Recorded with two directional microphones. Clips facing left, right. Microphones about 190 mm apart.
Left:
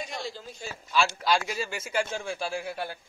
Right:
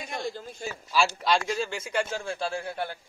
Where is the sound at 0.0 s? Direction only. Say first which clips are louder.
Right 2 dB; 50° right (ahead or behind).